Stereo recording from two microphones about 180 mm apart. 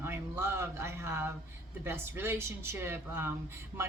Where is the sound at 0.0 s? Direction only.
15° right (ahead or behind).